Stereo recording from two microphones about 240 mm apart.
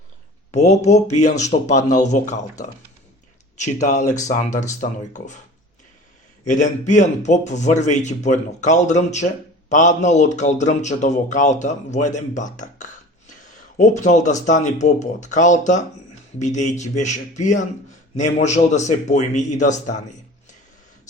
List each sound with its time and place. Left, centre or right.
0.5 s a man's voice: left
6.5 s a man's voice: left